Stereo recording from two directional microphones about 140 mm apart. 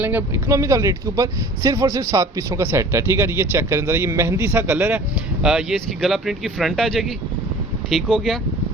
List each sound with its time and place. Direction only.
0.0 s speech: 15° right (ahead or behind); by 8.4 s centre (ahead or behind)